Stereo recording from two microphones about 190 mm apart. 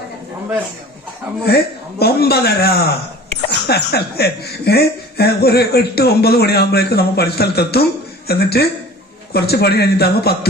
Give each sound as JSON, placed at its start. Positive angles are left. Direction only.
{"t": 1.5, "sound": "a man's voice", "side_deg": 55}